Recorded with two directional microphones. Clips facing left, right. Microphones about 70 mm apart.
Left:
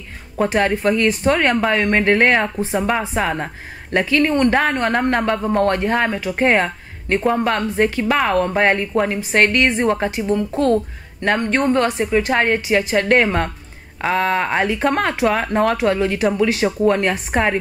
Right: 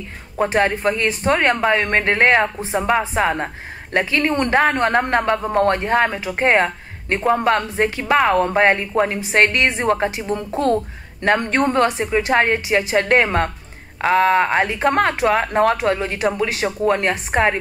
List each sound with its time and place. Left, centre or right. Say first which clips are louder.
0.6 s speech: left 1 dB; centre
3.3 s speech: right 2 dB; centre
14.0 s speech: right 3 dB; right
14.6 s speech: right 1 dB; centre